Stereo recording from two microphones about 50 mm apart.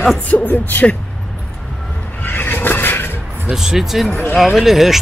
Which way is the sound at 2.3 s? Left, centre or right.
Left.